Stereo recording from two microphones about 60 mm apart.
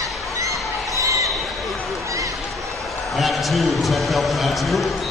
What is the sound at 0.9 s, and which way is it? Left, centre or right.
Basketball bounce, right.